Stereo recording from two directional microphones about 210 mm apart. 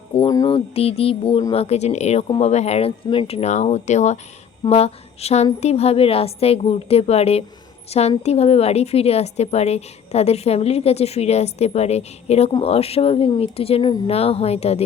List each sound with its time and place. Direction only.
0.3 s a woman's voice: 20° left (ahead or behind)